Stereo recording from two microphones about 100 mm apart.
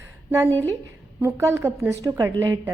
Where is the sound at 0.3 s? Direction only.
20° right (ahead or behind).